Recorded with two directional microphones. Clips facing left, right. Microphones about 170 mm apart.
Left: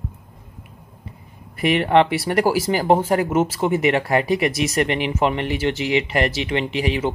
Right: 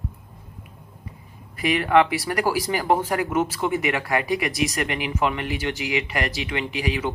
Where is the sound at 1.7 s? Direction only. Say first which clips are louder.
Left 2 dB; 25° left (ahead or behind).